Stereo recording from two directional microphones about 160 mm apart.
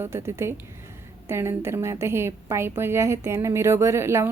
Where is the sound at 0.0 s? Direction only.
15° right (ahead or behind).